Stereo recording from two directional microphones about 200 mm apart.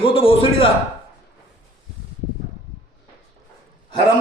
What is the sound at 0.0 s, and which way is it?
Speech, 25° left (ahead or behind).